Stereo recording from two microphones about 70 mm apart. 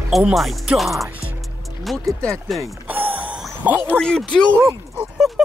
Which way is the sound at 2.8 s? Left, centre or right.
Right.